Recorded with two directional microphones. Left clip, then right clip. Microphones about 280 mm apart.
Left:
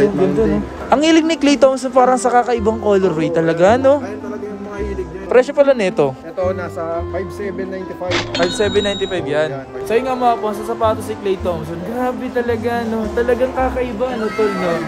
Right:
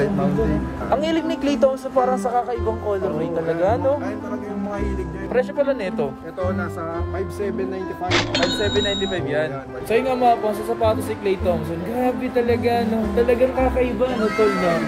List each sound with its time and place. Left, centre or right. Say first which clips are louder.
0.8 s speech: left 8 dB; left
5.3 s speech: left 9 dB; left
8.1 s speech: left 2 dB; centre
8.8 s speech: left 3 dB; centre
9.8 s speech: left 2 dB; centre
12.4 s speech: even; centre